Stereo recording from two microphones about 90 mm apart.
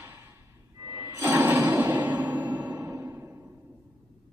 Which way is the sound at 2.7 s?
35° right (ahead or behind).